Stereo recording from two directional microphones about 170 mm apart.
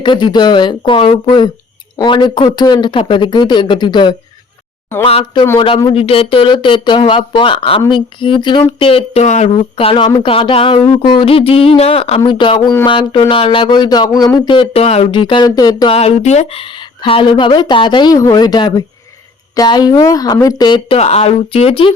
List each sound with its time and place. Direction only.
0.0 s speech: 25° left (ahead or behind); by 9.6 s 40° left (ahead or behind)
9.6 s speech: 30° left (ahead or behind)
16.0 s speech: 40° left (ahead or behind)
21.0 s speech: 40° left (ahead or behind)